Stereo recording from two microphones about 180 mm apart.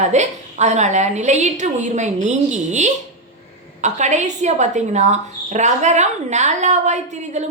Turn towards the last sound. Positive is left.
turn(degrees=-40)  # may be behind; listen again after turning